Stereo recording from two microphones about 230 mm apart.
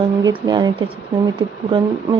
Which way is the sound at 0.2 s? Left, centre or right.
Centre.